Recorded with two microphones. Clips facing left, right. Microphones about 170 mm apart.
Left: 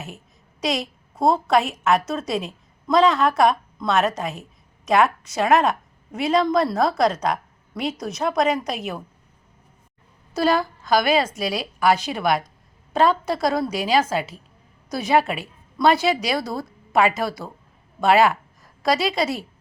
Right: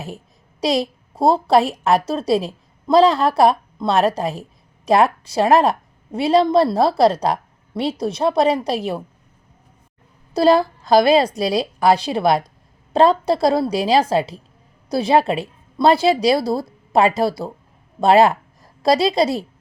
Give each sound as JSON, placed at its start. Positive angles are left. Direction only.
{"t": 0.6, "sound": "a woman's voice", "side_deg": -35}
{"t": 10.3, "sound": "a woman's voice", "side_deg": -35}